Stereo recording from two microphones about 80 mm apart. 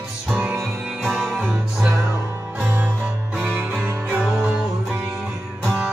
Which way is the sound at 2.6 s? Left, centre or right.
Right.